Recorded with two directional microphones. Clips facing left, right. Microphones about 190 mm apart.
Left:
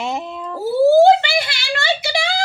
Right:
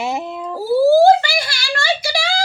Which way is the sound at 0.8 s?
20° left (ahead or behind).